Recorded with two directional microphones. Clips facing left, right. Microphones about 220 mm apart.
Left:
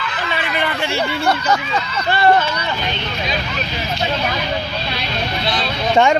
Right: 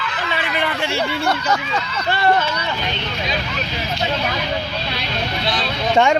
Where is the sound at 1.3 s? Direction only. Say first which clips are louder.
Left 2 dB; 25° left (ahead or behind).